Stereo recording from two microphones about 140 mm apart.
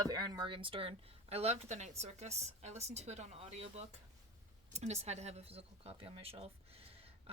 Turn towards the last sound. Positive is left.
turn(degrees=-45)  # may be behind; listen again after turning